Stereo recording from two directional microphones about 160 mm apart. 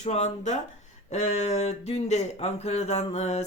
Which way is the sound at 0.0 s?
45° left (ahead or behind).